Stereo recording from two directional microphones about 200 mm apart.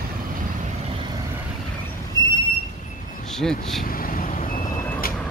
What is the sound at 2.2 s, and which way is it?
Train, 20° left (ahead or behind).